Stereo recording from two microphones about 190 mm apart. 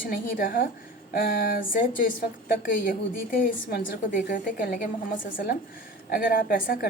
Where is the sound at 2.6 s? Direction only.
45° left (ahead or behind).